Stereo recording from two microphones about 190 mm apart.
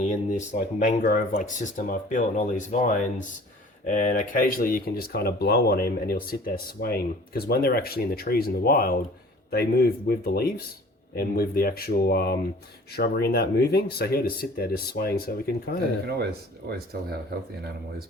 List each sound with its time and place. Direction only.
0.0 s speech: 40° left (ahead or behind)
16.0 s speech: 60° right (ahead or behind)